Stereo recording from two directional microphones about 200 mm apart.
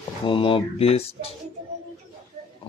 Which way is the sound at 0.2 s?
25° left (ahead or behind).